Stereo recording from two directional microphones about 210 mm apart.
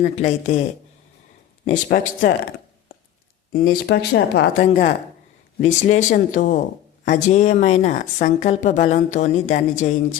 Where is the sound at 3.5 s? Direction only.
45° left (ahead or behind).